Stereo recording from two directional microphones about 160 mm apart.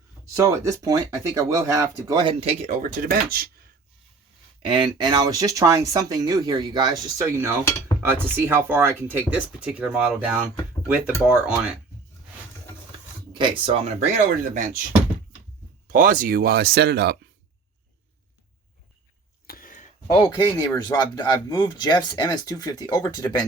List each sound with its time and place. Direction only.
0.3 s speech: 20° right (ahead or behind)
2.4 s speech: 40° right (ahead or behind); by 3.5 s 65° right (ahead or behind)
4.6 s speech: 30° right (ahead or behind); by 11.7 s 5° right (ahead or behind)
13.3 s speech: 30° right (ahead or behind)
14.5 s speech: 55° right (ahead or behind)
15.9 s speech: 60° right (ahead or behind); by 17.2 s 90° right
19.5 s a sound: 60° left (ahead or behind)
20.1 s speech: 25° left (ahead or behind)